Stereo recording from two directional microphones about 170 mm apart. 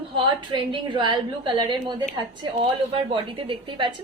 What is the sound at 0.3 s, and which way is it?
A woman's voice, 30° right (ahead or behind).